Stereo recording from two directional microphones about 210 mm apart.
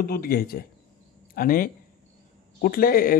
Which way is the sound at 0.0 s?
45° left (ahead or behind).